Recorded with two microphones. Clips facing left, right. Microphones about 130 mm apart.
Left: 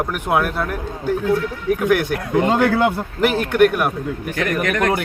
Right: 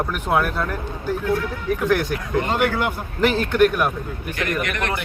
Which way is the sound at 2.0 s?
60° left (ahead or behind).